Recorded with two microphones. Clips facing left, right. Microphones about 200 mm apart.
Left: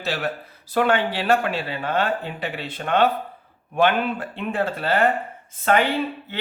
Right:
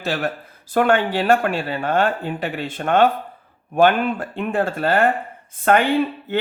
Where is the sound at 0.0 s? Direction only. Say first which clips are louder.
Right 3 dB; 45° right (ahead or behind).